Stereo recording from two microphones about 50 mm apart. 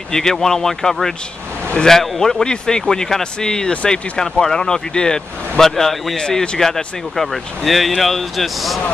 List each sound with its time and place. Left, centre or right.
0.1 s speech: centre
4.2 s speech: centre
6.2 s speech: centre
6.6 s speech: centre